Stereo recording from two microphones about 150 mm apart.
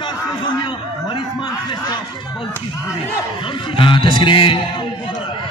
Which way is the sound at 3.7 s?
35° left (ahead or behind).